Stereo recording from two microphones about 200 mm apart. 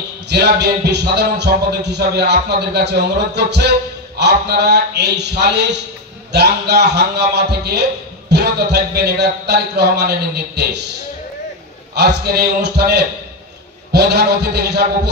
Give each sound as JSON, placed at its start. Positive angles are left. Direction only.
{"t": 0.3, "sound": "speech", "side_deg": -55}
{"t": 11.9, "sound": "speech", "side_deg": -55}